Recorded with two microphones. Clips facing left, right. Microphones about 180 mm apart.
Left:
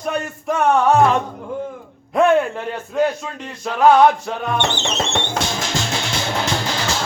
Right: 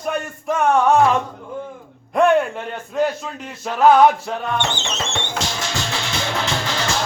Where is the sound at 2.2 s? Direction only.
Centre (ahead or behind).